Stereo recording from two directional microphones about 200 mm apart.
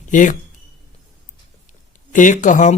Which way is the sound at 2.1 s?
40° left (ahead or behind).